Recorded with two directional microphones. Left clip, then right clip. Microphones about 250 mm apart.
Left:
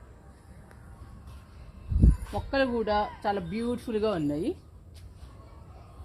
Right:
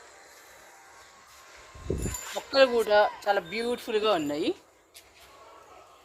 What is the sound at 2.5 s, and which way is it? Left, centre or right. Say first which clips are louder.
Speech: right 5 dB; right.